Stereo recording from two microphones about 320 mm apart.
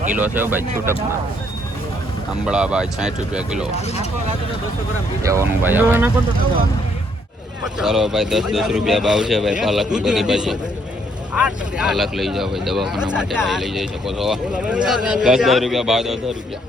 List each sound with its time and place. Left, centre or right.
0.2 s speech: centre
2.4 s speech: centre
3.8 s speech: centre
5.2 s speech: centre
7.8 s speech: centre